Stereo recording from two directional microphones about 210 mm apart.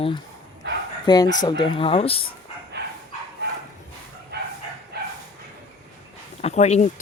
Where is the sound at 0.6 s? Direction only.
55° right (ahead or behind).